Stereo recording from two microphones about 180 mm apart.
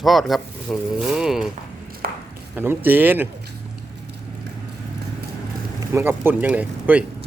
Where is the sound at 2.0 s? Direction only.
55° right (ahead or behind).